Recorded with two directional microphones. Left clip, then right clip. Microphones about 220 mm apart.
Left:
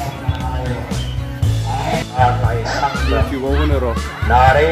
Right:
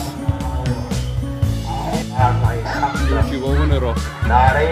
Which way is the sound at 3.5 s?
Centre (ahead or behind).